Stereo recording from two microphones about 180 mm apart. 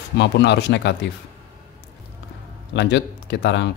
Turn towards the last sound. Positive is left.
turn(degrees=70)  # may be behind; listen again after turning